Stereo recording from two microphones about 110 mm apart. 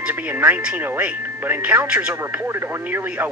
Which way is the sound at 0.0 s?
15° right (ahead or behind).